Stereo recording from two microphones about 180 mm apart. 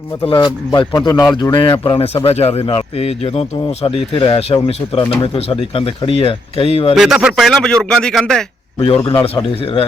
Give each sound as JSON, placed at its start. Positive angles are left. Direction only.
{"t": 0.2, "sound": "speech", "side_deg": 25}
{"t": 6.9, "sound": "a man's voice", "side_deg": -5}
{"t": 9.0, "sound": "speech", "side_deg": 30}